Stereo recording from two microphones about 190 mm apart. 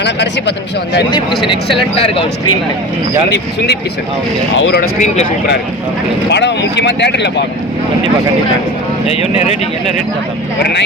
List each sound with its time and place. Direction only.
0.0 s speech: 65° left (ahead or behind)
1.7 s speech: 30° left (ahead or behind)
4.5 s speech: 70° left (ahead or behind)
6.3 s speech: 65° left (ahead or behind)
9.0 s speech: 35° left (ahead or behind)